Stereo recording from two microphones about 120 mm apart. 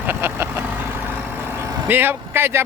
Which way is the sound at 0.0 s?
15° right (ahead or behind).